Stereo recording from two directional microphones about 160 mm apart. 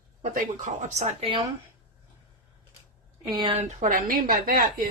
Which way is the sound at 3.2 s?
25° right (ahead or behind).